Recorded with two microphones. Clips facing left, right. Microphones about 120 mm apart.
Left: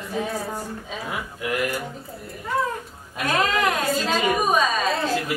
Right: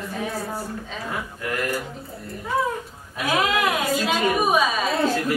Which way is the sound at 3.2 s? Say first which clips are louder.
Even; 5° right (ahead or behind).